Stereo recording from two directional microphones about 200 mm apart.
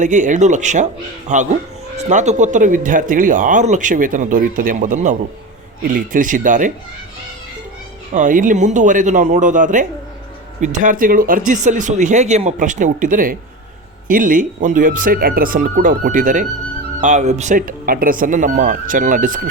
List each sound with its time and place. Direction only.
0.0 s speech: 40° right (ahead or behind)
8.1 s speech: 40° right (ahead or behind)